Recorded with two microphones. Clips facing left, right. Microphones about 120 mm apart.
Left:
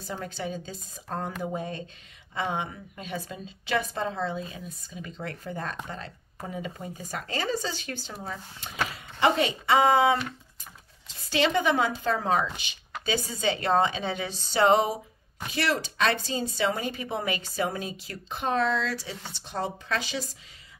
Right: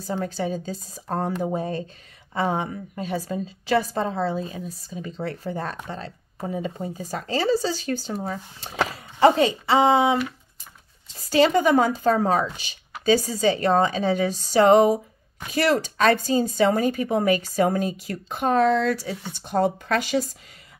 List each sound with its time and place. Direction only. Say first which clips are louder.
0.0 s a woman's voice: right 7 dB; 40° right (ahead or behind)
11.2 s a woman's voice: right 6 dB; 40° right (ahead or behind)